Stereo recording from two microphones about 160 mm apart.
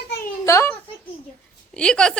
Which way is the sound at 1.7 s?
5° left (ahead or behind).